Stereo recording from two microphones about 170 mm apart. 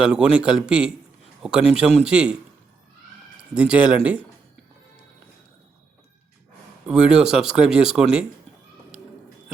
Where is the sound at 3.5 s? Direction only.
5° right (ahead or behind).